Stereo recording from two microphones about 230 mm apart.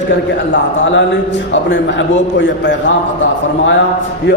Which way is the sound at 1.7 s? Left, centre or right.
Left.